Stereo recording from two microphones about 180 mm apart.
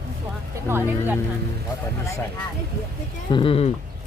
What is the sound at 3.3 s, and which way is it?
Speech, 30° left (ahead or behind).